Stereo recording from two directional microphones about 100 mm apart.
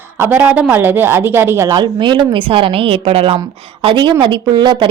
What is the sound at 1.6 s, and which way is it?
Speech, 45° right (ahead or behind).